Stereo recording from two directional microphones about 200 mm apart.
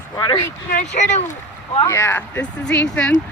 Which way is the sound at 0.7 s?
40° left (ahead or behind).